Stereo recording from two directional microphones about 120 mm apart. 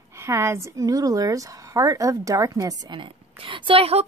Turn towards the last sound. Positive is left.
turn(degrees=-55)  # may be behind; listen again after turning